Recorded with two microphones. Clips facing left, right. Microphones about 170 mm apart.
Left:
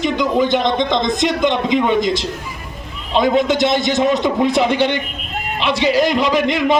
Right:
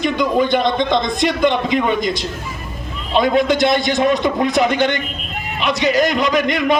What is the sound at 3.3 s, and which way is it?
A man's voice, 25° left (ahead or behind).